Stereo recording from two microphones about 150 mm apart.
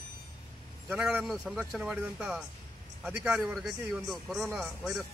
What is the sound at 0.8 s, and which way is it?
Speech, 10° right (ahead or behind).